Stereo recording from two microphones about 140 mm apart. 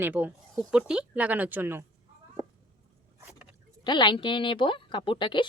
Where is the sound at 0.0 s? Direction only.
15° right (ahead or behind).